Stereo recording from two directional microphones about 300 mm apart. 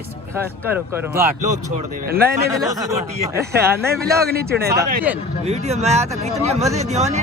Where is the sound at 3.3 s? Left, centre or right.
Centre.